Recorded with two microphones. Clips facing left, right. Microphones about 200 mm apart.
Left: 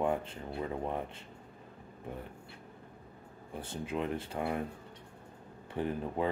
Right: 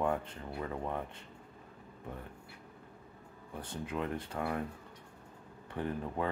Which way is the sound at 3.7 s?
25° left (ahead or behind).